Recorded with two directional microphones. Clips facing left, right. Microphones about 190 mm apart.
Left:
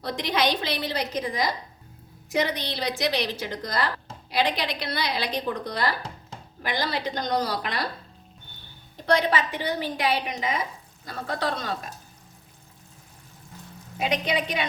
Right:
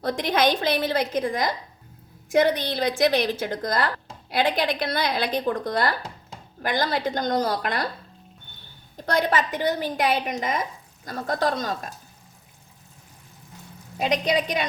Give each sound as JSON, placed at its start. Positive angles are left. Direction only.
{"t": 0.0, "sound": "a woman's voice", "side_deg": -50}
{"t": 9.0, "sound": "a woman's voice", "side_deg": -45}
{"t": 14.0, "sound": "a woman's voice", "side_deg": -40}